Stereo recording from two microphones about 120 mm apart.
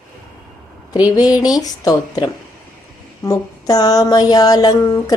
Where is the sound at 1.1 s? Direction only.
30° left (ahead or behind).